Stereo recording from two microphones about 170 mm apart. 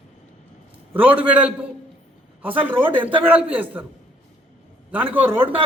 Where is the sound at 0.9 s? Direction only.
10° right (ahead or behind).